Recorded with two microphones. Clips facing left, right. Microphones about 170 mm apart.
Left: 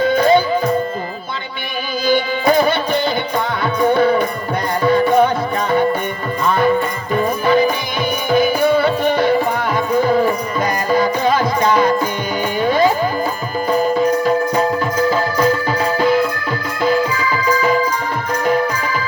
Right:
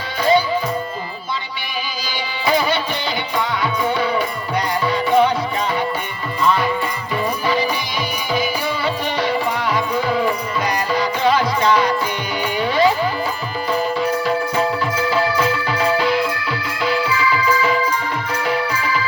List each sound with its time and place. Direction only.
0.0 s music: 50° left (ahead or behind)
2.0 s music: 50° left (ahead or behind)
6.4 s music: 50° left (ahead or behind)